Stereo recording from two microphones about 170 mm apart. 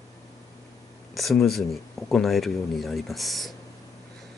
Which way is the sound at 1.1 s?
Centre (ahead or behind).